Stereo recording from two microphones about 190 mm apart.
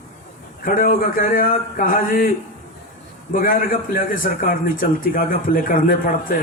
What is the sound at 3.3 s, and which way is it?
A man's voice, 45° left (ahead or behind).